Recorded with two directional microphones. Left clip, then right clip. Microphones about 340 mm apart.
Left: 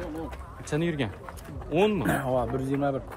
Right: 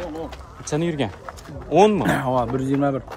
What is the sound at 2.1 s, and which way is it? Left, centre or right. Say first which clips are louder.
Speech: right 6 dB; right.